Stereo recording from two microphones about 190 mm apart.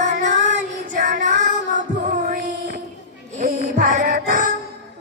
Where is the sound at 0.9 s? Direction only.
45° right (ahead or behind).